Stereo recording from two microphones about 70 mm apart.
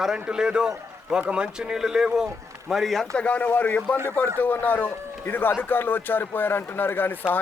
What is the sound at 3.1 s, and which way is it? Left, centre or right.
A man's voice, centre.